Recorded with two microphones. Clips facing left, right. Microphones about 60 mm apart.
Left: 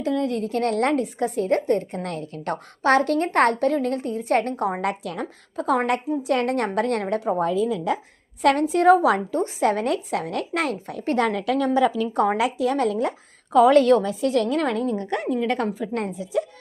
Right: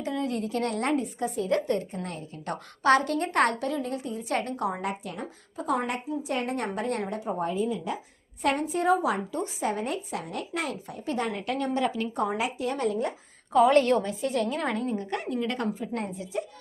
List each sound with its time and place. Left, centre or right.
0.0 s a woman's voice: left
1.5 s a woman's voice: left
1.9 s a woman's voice: left
4.8 s speech: left
5.2 s a woman's voice: left